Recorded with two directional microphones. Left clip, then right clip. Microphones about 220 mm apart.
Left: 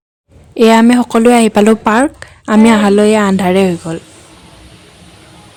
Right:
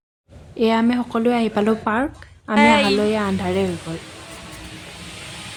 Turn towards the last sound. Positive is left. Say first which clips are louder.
# left 10 dB
turn(degrees=50)  # may be behind; listen again after turning